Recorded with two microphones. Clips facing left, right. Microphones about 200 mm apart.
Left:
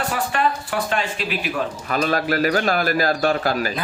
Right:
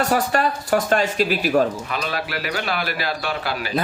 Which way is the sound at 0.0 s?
40° right (ahead or behind).